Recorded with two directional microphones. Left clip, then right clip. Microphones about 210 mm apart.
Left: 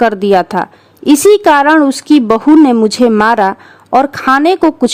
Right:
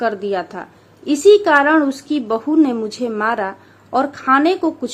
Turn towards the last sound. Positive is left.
turn(degrees=50)  # may be behind; listen again after turning